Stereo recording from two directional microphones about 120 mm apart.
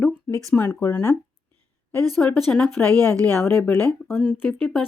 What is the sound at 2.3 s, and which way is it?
Speech, 5° left (ahead or behind).